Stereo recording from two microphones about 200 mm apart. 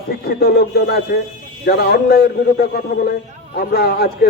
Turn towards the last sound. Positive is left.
turn(degrees=50)  # may be behind; listen again after turning